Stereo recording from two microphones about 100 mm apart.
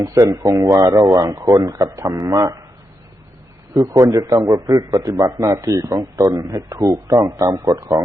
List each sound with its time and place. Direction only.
0.0 s a man's voice: 35° right (ahead or behind)
3.8 s a man's voice: 35° right (ahead or behind)